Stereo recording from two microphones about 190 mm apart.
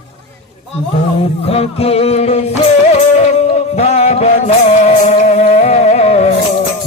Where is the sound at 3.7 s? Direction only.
35° left (ahead or behind).